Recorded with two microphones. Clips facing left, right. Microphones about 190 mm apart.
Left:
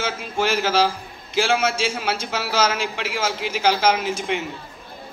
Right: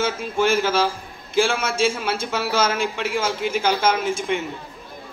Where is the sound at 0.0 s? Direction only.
55° right (ahead or behind).